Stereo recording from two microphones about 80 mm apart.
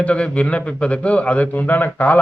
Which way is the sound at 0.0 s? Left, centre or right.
Centre.